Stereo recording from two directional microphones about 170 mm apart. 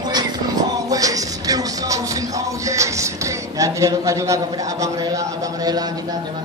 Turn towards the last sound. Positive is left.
turn(degrees=-20)  # may be behind; listen again after turning